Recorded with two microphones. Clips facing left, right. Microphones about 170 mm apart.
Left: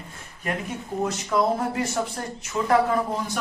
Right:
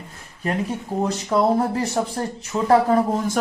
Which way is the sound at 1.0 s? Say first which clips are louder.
Right 3 dB; 35° right (ahead or behind).